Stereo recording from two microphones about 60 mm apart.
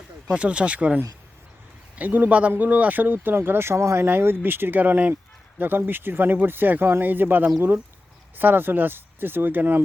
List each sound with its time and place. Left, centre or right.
0.3 s speech: centre; by 4.0 s right
4.0 s speech: right